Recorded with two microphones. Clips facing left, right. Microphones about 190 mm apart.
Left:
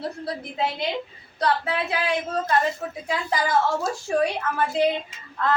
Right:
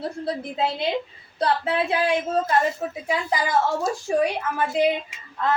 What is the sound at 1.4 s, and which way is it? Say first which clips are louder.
A woman's voice: right 2 dB; 30° right (ahead or behind).